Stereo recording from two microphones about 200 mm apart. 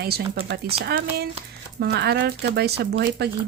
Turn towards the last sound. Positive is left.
turn(degrees=-55)  # may be behind; listen again after turning